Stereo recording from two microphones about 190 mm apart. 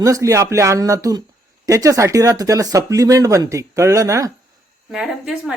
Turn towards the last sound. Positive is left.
turn(degrees=-5)  # may be behind; listen again after turning